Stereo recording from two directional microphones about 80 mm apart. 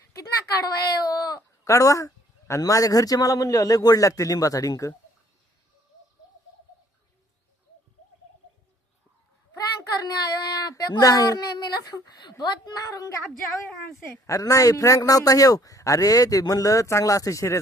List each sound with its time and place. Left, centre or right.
0.1 s a sound: left
1.7 s a man's voice: left
9.6 s speech: left
14.3 s a man's voice: left